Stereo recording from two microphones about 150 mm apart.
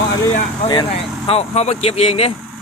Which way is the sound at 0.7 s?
35° left (ahead or behind).